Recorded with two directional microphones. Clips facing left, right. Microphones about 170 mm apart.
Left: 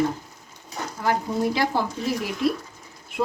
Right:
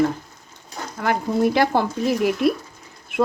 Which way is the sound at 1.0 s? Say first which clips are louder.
Right 4 dB; 60° right (ahead or behind).